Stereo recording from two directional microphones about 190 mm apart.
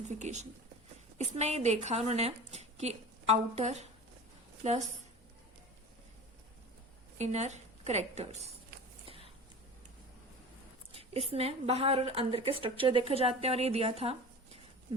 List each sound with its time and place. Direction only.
0.1 s a woman's voice: 40° right (ahead or behind)
7.2 s a woman's voice: 35° right (ahead or behind)
10.9 s a woman's voice: 30° right (ahead or behind)